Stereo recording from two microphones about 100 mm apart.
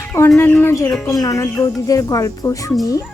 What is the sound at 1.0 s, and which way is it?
Bird, 35° left (ahead or behind).